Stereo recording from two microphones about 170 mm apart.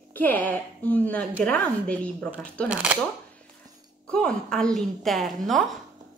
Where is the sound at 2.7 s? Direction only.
10° right (ahead or behind).